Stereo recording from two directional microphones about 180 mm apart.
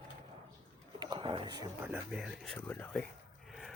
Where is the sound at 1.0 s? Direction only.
25° right (ahead or behind).